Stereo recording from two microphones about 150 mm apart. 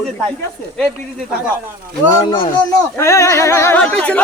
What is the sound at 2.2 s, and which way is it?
Speech, 30° left (ahead or behind).